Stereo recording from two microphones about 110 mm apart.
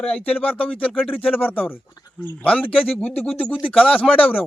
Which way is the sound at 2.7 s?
60° left (ahead or behind).